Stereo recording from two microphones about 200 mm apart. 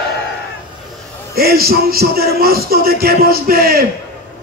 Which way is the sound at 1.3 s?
50° right (ahead or behind).